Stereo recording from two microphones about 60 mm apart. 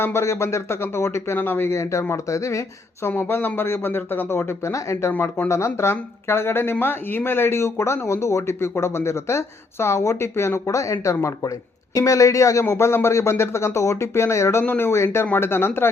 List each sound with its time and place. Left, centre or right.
0.0 s speech: left
1.7 s speech: left
3.1 s speech: left